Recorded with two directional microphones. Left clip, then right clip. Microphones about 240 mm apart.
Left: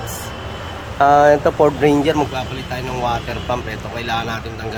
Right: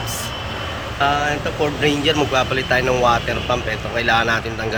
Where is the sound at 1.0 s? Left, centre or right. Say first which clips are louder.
Left 8 dB; left.